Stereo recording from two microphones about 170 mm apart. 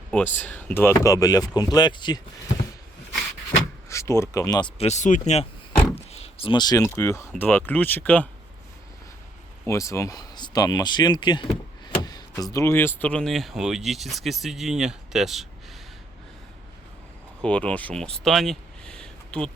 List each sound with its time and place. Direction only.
0.1 s speech: 10° left (ahead or behind); by 2.2 s 25° left (ahead or behind)
3.8 s speech: 15° left (ahead or behind)
4.8 s speech: 40° left (ahead or behind); by 8.3 s 10° left (ahead or behind)
9.6 s speech: 15° left (ahead or behind); by 15.4 s centre (ahead or behind)
17.4 s speech: 5° left (ahead or behind)